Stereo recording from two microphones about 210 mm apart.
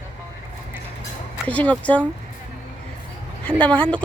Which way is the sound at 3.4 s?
5° left (ahead or behind).